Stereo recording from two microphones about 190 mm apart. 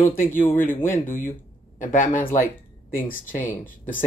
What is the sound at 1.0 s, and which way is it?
Speech, 45° left (ahead or behind).